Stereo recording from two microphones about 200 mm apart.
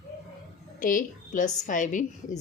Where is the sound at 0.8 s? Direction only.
40° left (ahead or behind).